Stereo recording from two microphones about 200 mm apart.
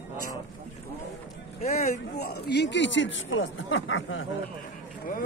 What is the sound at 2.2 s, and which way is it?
Speech, 55° left (ahead or behind).